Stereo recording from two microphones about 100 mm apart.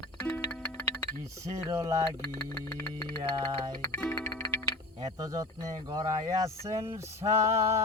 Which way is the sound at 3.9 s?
15° left (ahead or behind).